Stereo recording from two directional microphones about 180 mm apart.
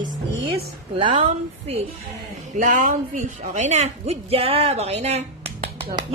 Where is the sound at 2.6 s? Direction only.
45° right (ahead or behind).